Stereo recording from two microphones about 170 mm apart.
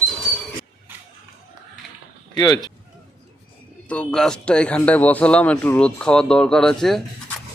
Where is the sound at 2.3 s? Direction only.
25° left (ahead or behind).